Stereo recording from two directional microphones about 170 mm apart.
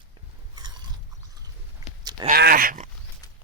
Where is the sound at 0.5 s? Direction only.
25° right (ahead or behind).